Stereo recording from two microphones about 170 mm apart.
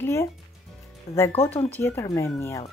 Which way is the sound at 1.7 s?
15° left (ahead or behind).